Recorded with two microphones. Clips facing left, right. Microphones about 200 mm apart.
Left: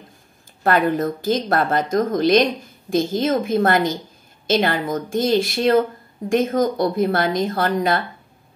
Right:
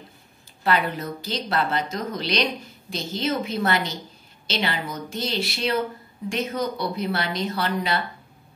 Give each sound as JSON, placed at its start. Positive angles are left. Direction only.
{"t": 0.7, "sound": "speech", "side_deg": 50}